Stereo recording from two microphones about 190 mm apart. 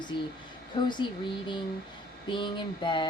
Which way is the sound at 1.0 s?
25° left (ahead or behind).